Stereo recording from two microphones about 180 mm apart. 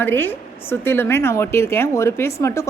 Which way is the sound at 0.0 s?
10° left (ahead or behind).